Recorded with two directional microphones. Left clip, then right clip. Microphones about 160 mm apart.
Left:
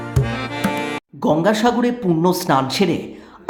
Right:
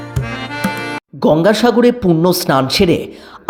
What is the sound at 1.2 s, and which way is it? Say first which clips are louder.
Speech: right 5 dB; 30° right (ahead or behind).